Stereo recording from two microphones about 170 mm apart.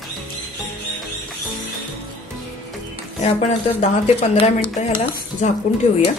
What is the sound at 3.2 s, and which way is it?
A woman's voice, 45° left (ahead or behind).